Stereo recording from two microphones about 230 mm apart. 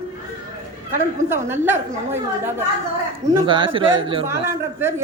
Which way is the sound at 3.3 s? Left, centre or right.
Right.